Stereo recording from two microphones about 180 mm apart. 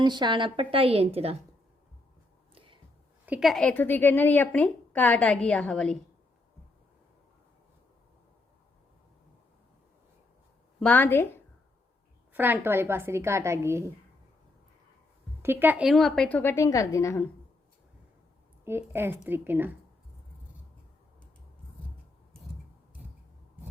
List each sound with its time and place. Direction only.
0.0 s a woman's voice: 25° right (ahead or behind)
3.2 s a woman's voice: 5° right (ahead or behind)
10.8 s a woman's voice: 10° left (ahead or behind)
12.3 s a woman's voice: 10° right (ahead or behind)
15.4 s a woman's voice: 10° right (ahead or behind); by 17.2 s 15° left (ahead or behind)
18.6 s a woman's voice: 15° right (ahead or behind)